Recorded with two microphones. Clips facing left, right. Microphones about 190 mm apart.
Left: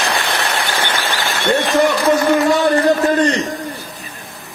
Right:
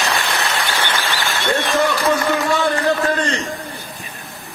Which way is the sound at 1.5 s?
15° left (ahead or behind).